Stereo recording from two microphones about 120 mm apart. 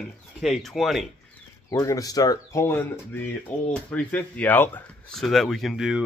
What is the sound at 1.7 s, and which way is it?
Speech, 30° left (ahead or behind).